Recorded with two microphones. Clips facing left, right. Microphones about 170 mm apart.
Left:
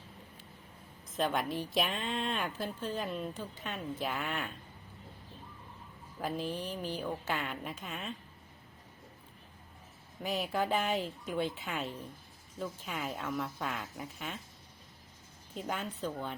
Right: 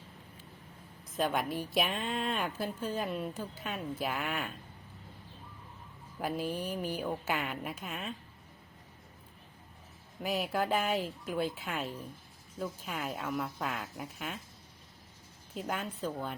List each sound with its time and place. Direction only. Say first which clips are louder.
1.1 s a woman's voice: right 1 dB; 5° right (ahead or behind)
6.1 s a woman's voice: right 2 dB; 5° right (ahead or behind)
10.2 s a woman's voice: right 1 dB; 5° right (ahead or behind)
15.5 s a woman's voice: right 1 dB; centre (ahead or behind)